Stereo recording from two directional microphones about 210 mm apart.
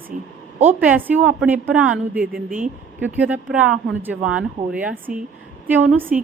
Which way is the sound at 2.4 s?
35° right (ahead or behind).